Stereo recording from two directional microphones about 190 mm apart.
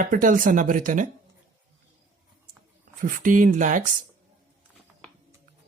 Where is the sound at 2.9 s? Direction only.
45° right (ahead or behind).